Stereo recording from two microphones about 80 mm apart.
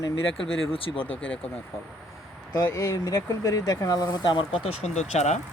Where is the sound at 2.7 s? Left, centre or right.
Left.